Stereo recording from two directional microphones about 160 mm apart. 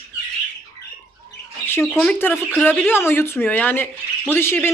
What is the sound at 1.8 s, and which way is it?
Speech, centre (ahead or behind).